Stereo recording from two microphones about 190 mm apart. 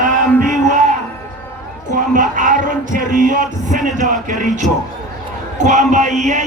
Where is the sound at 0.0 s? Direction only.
45° right (ahead or behind).